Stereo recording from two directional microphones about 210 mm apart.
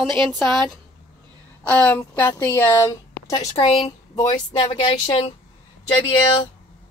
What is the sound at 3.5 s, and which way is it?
Speech, 25° left (ahead or behind).